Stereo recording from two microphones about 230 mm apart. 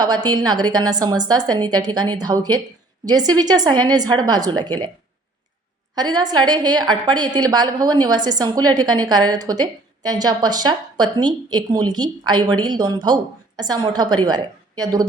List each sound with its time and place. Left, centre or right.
0.0 s a woman's voice: centre
5.9 s a woman's voice: centre